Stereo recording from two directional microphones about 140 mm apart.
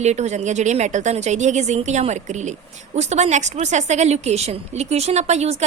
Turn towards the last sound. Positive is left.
turn(degrees=-50)  # may be behind; listen again after turning